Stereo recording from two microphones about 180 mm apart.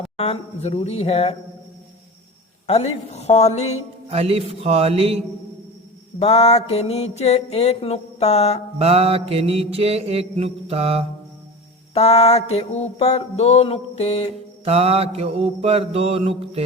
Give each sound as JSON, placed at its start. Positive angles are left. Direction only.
{"t": 0.2, "sound": "mantra", "side_deg": 35}
{"t": 2.6, "sound": "mantra", "side_deg": 35}
{"t": 4.1, "sound": "mantra", "side_deg": -35}
{"t": 6.1, "sound": "mantra", "side_deg": 35}
{"t": 8.8, "sound": "mantra", "side_deg": -35}
{"t": 11.9, "sound": "mantra", "side_deg": 35}
{"t": 14.6, "sound": "mantra", "side_deg": -35}